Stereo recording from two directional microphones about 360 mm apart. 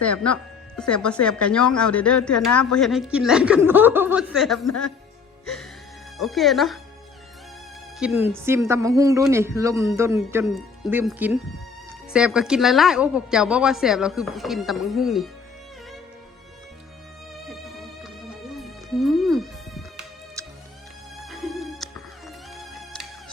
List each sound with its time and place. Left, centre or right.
0.0 s a woman's voice: centre
6.1 s a woman's voice: centre
7.9 s a woman's voice: centre
18.6 s music: centre